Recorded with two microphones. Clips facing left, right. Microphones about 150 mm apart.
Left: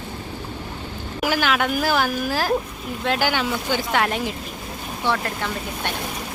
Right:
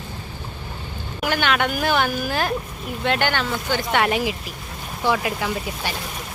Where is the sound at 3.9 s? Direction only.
Centre (ahead or behind).